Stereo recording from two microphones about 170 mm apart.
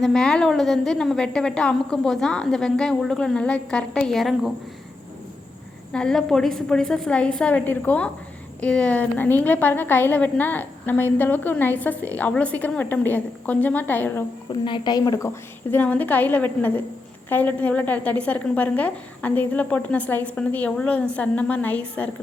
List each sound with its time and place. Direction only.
0.0 s a woman's voice: 5° left (ahead or behind)
5.9 s a woman's voice: 5° left (ahead or behind)
14.5 s a woman's voice: 25° left (ahead or behind)
15.7 s a woman's voice: 10° left (ahead or behind)